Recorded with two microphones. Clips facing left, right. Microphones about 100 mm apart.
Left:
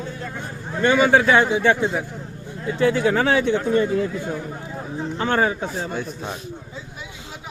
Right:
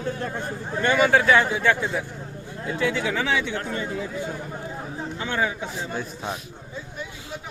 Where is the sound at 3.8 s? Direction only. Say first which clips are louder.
Left 10 dB; 60° left (ahead or behind).